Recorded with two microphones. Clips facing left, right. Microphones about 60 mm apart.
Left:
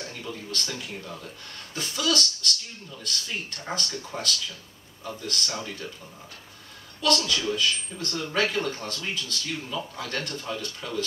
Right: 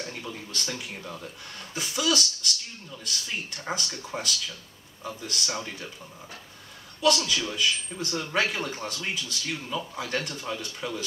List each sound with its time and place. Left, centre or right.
0.2 s speech: centre
7.0 s speech: centre